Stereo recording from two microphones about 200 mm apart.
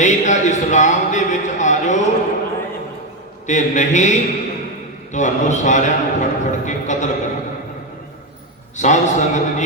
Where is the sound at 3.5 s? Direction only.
35° left (ahead or behind).